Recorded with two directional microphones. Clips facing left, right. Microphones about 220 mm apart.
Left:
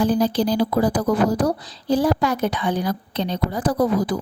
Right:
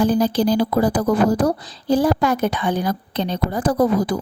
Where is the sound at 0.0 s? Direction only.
50° right (ahead or behind).